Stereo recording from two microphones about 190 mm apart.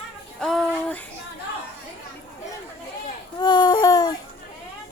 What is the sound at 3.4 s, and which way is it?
Speech, 20° left (ahead or behind).